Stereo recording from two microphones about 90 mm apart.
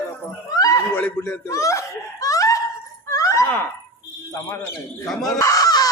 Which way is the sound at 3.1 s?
35° left (ahead or behind).